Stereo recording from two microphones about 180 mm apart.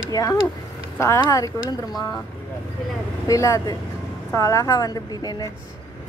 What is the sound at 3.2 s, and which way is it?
A woman's voice, 15° left (ahead or behind).